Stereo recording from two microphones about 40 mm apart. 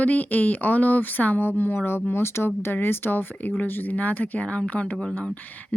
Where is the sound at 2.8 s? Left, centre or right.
Left.